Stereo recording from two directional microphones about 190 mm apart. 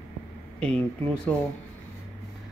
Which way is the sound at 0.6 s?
5° left (ahead or behind).